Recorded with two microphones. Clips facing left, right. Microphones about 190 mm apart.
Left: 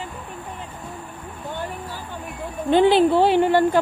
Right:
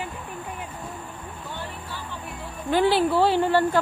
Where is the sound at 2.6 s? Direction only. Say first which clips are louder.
Left 5 dB; 20° left (ahead or behind).